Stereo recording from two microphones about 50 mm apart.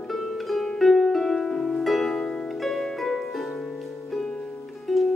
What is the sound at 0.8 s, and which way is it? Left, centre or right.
Harp, centre.